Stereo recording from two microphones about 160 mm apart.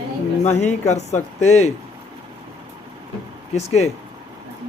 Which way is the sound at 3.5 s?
45° left (ahead or behind).